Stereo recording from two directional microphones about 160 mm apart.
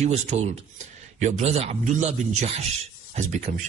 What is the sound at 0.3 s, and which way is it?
Speech, 45° right (ahead or behind).